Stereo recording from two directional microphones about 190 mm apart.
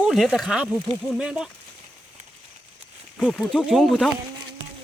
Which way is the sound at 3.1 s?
5° left (ahead or behind).